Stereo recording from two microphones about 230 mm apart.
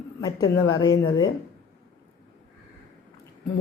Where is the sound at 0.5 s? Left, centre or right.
Left.